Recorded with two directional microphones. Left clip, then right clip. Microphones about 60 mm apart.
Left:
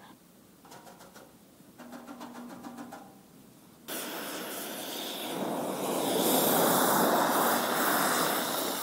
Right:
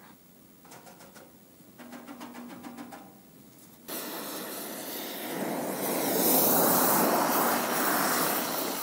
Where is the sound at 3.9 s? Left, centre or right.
Centre.